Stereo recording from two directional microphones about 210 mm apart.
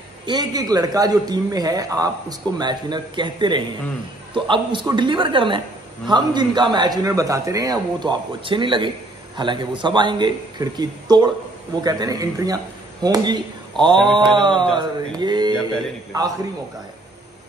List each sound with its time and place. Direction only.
0.3 s a man's voice: 20° right (ahead or behind)